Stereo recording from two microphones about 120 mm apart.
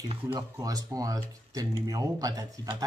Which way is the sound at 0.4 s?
30° right (ahead or behind).